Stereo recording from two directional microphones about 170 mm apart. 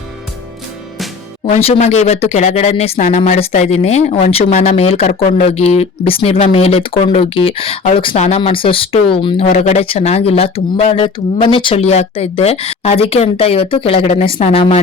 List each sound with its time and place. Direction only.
1.5 s speech: 40° left (ahead or behind)